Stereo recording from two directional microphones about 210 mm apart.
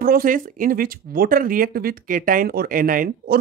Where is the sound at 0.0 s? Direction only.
45° right (ahead or behind).